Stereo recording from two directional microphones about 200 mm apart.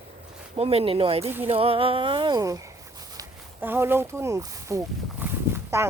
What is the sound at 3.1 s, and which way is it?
Speech, 15° right (ahead or behind).